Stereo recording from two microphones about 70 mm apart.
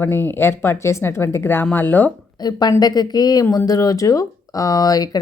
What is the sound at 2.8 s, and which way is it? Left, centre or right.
Speech, left.